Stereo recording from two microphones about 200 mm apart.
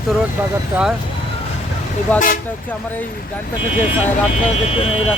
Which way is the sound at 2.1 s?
45° left (ahead or behind).